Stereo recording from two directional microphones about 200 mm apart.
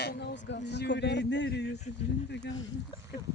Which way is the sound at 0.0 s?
50° left (ahead or behind).